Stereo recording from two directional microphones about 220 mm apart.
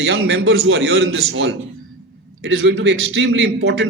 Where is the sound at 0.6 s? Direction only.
65° right (ahead or behind).